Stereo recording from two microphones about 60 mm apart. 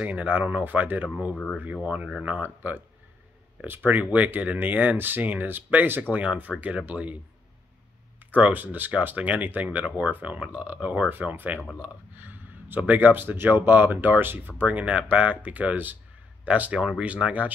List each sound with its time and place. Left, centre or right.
0.0 s speech: right
1.3 s speech: centre
1.6 s speech: right
8.3 s speech: right